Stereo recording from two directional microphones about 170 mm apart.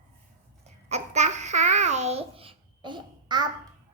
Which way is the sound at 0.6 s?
40° right (ahead or behind).